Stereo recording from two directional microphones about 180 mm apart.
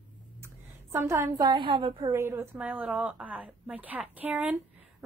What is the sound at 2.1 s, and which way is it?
Speech, 15° right (ahead or behind).